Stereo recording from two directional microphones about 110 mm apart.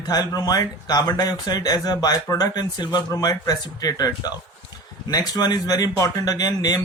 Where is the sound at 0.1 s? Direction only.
35° left (ahead or behind).